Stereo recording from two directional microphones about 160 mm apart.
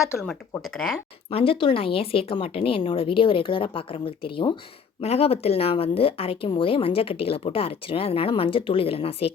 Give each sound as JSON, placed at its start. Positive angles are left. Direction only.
{"t": 0.2, "sound": "speech", "side_deg": 5}
{"t": 1.3, "sound": "speech", "side_deg": 35}